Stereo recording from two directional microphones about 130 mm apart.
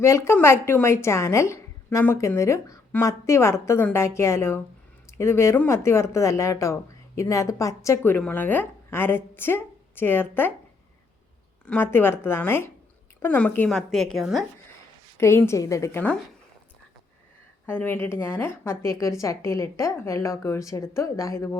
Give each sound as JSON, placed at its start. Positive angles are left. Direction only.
{"t": 0.0, "sound": "a woman's voice", "side_deg": 20}
{"t": 11.6, "sound": "a woman's voice", "side_deg": 15}
{"t": 15.2, "sound": "a woman's voice", "side_deg": 20}
{"t": 17.7, "sound": "a woman's voice", "side_deg": 15}